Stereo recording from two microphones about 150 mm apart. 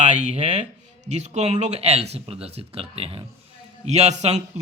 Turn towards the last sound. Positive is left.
turn(degrees=-45)  # may be behind; listen again after turning